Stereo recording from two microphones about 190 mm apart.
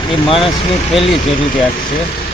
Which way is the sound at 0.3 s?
30° left (ahead or behind).